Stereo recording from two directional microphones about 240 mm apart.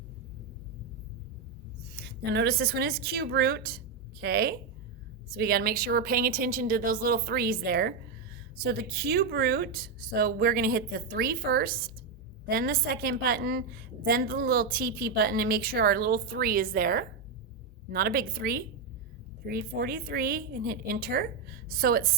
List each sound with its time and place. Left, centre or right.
2.0 s a woman's voice: right